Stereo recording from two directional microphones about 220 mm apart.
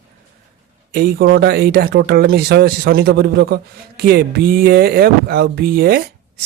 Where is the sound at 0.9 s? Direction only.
45° right (ahead or behind).